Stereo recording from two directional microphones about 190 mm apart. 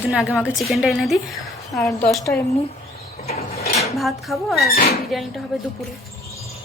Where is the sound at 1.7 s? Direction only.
15° left (ahead or behind).